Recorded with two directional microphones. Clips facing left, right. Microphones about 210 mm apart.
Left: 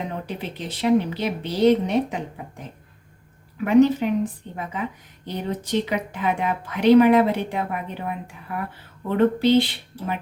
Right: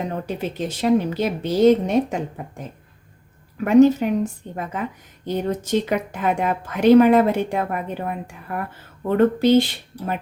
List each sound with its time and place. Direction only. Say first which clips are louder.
0.3 s a woman's voice: right 5 dB; 45° right (ahead or behind)